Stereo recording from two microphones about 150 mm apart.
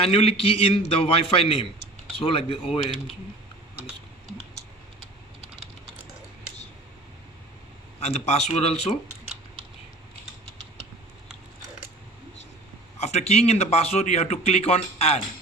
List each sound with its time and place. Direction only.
0.0 s a man's voice: 40° left (ahead or behind)
8.0 s a man's voice: 45° left (ahead or behind)
13.0 s a man's voice: 45° left (ahead or behind)